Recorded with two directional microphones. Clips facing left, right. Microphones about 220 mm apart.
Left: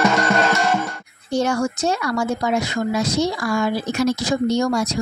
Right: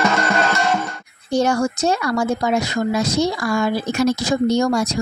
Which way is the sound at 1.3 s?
40° right (ahead or behind).